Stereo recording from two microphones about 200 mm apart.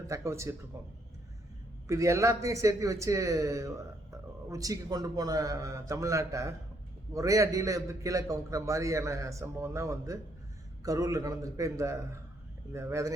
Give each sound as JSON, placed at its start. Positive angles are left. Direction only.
{"t": 0.1, "sound": "a man's voice", "side_deg": -15}
{"t": 1.9, "sound": "a man's voice", "side_deg": -15}